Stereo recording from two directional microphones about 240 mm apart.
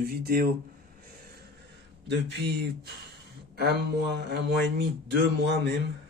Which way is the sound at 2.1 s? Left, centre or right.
Right.